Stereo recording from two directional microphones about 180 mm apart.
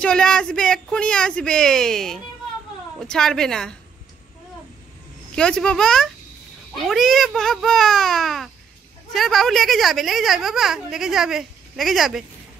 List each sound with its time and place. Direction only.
0.0 s a woman's voice: 5° left (ahead or behind)
5.3 s a woman's voice: 5° left (ahead or behind)